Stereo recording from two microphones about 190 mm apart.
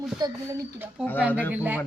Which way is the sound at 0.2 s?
20° right (ahead or behind).